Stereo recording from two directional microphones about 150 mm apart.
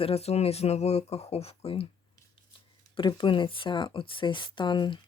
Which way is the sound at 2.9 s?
30° left (ahead or behind).